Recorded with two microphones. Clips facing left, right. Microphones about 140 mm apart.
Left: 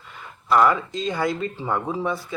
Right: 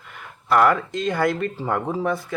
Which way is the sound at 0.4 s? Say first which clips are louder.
Right 1 dB; 60° right (ahead or behind).